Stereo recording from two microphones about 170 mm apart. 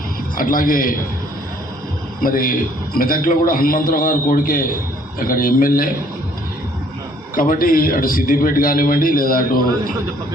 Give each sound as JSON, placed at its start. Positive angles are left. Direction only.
{"t": 0.3, "sound": "a man's voice", "side_deg": 55}
{"t": 2.2, "sound": "a man's voice", "side_deg": 55}
{"t": 7.3, "sound": "a man's voice", "side_deg": 55}